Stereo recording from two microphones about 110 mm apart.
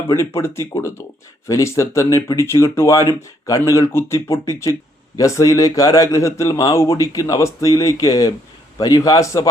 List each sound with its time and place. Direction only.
0.1 s speech: 25° left (ahead or behind)